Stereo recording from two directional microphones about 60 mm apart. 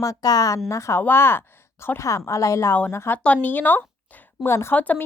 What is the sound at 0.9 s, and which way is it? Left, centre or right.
Speech, left.